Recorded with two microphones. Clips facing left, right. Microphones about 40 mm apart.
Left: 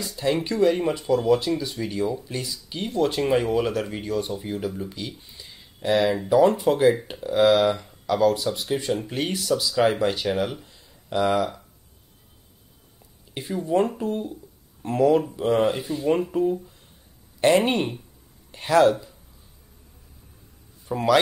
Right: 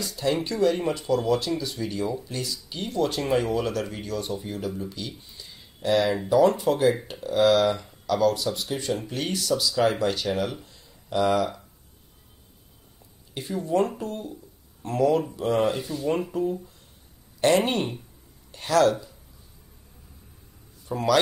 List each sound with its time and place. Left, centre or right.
0.2 s speech: centre
5.4 s a sound: centre
6.2 s speech: centre
13.4 s speech: centre
14.8 s speech: left
17.5 s speech: centre
18.5 s speech: left
18.9 s speech: centre
20.9 s speech: left